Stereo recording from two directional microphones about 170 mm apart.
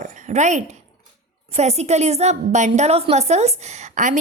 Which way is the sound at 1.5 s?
40° right (ahead or behind).